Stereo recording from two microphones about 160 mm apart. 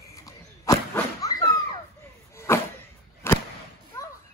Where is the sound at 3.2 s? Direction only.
15° left (ahead or behind).